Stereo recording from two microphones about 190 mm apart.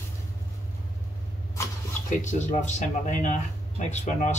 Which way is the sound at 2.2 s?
40° left (ahead or behind).